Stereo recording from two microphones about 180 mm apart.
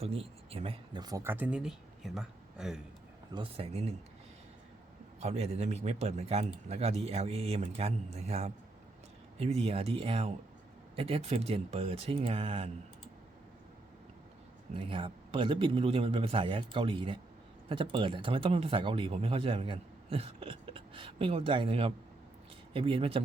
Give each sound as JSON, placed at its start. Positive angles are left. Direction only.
{"t": 0.0, "sound": "speech", "side_deg": -35}
{"t": 3.3, "sound": "a man's voice", "side_deg": -30}
{"t": 5.2, "sound": "a man's voice", "side_deg": -40}
{"t": 14.7, "sound": "a man's voice", "side_deg": -30}